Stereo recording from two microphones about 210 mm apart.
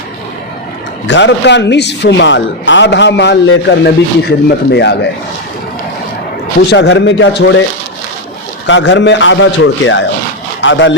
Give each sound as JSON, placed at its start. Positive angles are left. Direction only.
{"t": 1.0, "sound": "a man's voice", "side_deg": 60}
{"t": 6.7, "sound": "a man's voice", "side_deg": 60}
{"t": 8.6, "sound": "a man's voice", "side_deg": 60}